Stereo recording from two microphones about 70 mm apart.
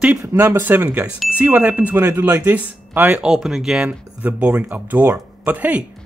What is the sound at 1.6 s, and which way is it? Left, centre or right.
Speech, right.